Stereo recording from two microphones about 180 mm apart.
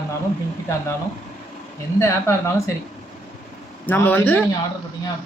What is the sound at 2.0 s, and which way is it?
Speech, 15° left (ahead or behind).